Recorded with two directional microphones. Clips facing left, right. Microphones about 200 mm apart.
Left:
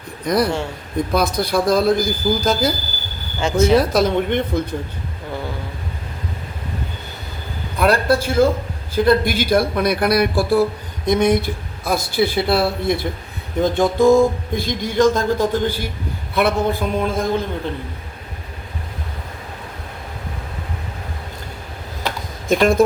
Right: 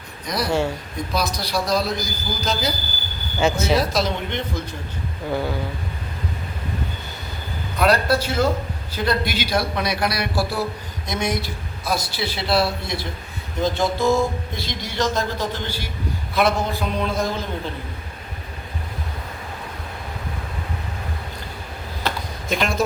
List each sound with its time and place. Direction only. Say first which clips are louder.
0.3 s a man's voice: left 3 dB; 55° left (ahead or behind)
3.4 s speech: right 1 dB; 5° right (ahead or behind)
3.8 s a man's voice: left 6 dB; 55° left (ahead or behind)
7.8 s a man's voice: left 2 dB; 50° left (ahead or behind)
22.4 s a man's voice: left 9 dB; 50° left (ahead or behind)